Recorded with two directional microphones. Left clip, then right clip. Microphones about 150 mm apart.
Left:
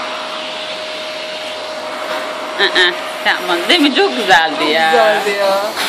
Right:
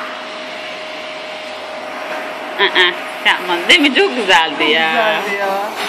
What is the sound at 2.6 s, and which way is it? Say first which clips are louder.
Speech: even; 10° left (ahead or behind).